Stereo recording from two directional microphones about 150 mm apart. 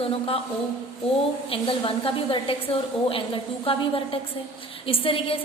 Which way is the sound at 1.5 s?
35° left (ahead or behind).